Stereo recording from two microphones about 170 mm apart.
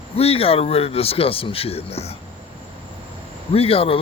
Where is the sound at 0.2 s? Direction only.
35° left (ahead or behind).